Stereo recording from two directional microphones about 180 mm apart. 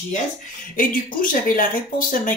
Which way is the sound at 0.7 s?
50° left (ahead or behind).